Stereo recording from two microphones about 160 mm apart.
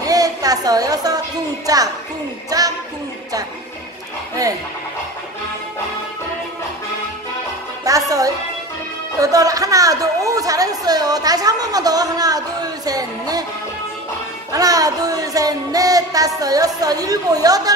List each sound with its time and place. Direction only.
0.0 s a sound: 20° right (ahead or behind)
1.7 s speech: 25° right (ahead or behind)
7.8 s music: 20° right (ahead or behind)
9.2 s speech: 20° right (ahead or behind)
14.5 s music: 25° right (ahead or behind)